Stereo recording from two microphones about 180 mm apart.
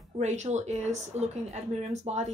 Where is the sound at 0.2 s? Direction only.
40° right (ahead or behind).